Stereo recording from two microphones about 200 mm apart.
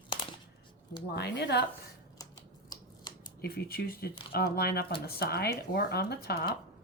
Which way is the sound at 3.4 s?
50° left (ahead or behind).